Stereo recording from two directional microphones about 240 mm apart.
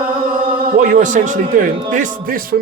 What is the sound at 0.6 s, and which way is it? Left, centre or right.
Speech, right.